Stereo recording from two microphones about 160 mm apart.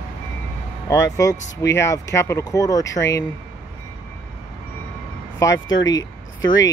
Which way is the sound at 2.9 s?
90° left.